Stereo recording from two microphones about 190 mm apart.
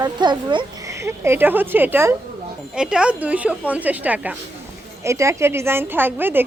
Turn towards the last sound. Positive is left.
turn(degrees=-10)  # may be behind; listen again after turning